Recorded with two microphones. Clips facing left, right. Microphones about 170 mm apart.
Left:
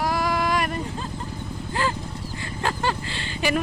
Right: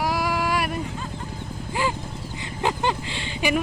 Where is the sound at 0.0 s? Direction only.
10° right (ahead or behind).